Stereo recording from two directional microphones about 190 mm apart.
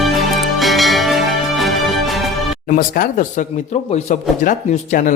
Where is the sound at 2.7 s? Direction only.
45° left (ahead or behind).